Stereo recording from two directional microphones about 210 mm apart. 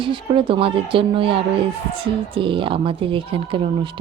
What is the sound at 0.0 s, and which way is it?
Speech, 25° right (ahead or behind).